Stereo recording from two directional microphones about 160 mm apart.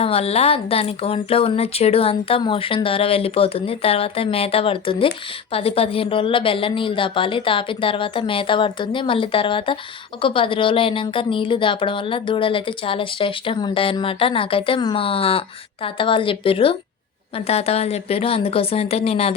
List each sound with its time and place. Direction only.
0.0 s speech: 40° left (ahead or behind)